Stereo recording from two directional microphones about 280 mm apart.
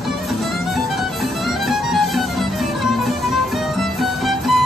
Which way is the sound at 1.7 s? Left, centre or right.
Centre.